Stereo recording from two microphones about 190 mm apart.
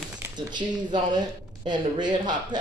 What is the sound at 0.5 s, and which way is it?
Speech, 25° right (ahead or behind).